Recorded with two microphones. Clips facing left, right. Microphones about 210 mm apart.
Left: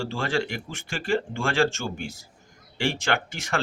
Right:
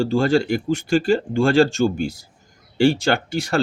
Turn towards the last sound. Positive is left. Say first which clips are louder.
# right 7 dB
turn(degrees=-35)  # may be behind; listen again after turning